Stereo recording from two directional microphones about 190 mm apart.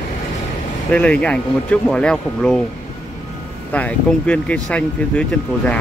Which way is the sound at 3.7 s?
5° left (ahead or behind).